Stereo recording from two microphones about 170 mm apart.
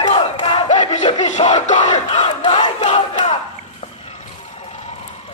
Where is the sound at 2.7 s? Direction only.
40° left (ahead or behind).